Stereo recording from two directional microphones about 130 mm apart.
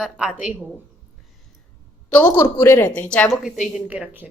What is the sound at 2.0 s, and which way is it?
A woman's voice, 15° left (ahead or behind).